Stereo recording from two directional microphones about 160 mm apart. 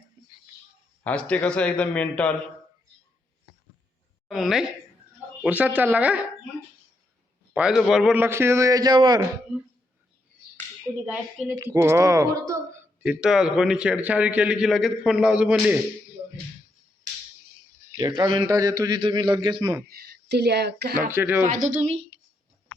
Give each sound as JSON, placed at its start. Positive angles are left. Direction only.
{"t": 1.0, "sound": "speech", "side_deg": 10}
{"t": 4.3, "sound": "a man's voice", "side_deg": 0}
{"t": 7.5, "sound": "a man's voice", "side_deg": -5}
{"t": 8.2, "sound": "a man's voice", "side_deg": -15}
{"t": 10.8, "sound": "a man's voice", "side_deg": -5}
{"t": 11.5, "sound": "a man's voice", "side_deg": -20}
{"t": 13.0, "sound": "a man's voice", "side_deg": -5}
{"t": 17.9, "sound": "a man's voice", "side_deg": -25}
{"t": 19.9, "sound": "speech", "side_deg": -80}
{"t": 20.9, "sound": "a man's voice", "side_deg": -15}
{"t": 21.4, "sound": "a woman's voice", "side_deg": -55}